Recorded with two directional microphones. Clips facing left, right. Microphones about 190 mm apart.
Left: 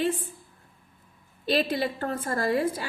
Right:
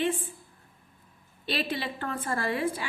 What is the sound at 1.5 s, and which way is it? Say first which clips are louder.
A woman's voice: left 6 dB; 40° left (ahead or behind).